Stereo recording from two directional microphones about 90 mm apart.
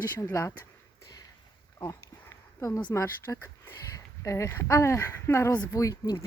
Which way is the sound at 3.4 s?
35° left (ahead or behind).